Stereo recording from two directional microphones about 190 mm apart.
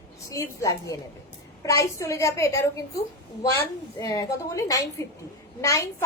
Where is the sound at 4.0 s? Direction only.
20° left (ahead or behind).